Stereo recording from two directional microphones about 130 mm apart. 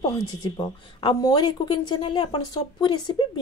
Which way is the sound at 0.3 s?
35° left (ahead or behind).